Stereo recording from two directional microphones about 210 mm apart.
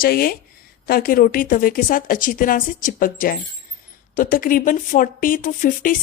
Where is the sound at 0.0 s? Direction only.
45° left (ahead or behind).